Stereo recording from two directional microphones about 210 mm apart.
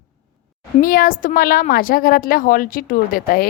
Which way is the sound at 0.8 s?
40° left (ahead or behind).